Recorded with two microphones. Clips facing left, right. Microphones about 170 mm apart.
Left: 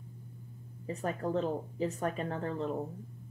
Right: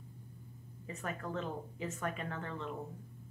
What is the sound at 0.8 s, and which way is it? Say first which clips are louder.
A woman's voice: left 7 dB; 35° left (ahead or behind).